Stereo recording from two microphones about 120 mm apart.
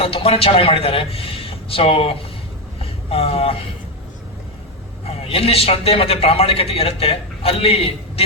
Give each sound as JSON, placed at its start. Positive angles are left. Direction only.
{"t": 0.0, "sound": "a man's voice", "side_deg": 55}
{"t": 5.0, "sound": "a man's voice", "side_deg": 55}